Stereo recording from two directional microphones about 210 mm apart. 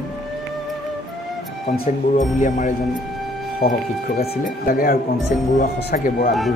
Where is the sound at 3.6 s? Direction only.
45° left (ahead or behind).